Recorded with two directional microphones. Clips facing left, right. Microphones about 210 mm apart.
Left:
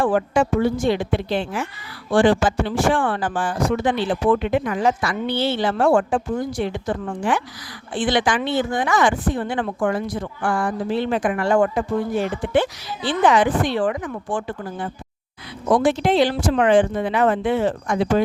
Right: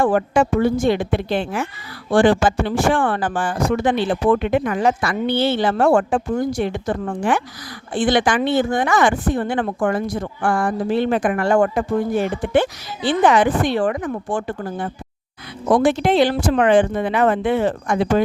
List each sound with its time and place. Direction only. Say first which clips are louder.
0.0 s speech: right 2 dB; 45° right (ahead or behind)
15.7 s speech: right 2 dB; 60° right (ahead or behind)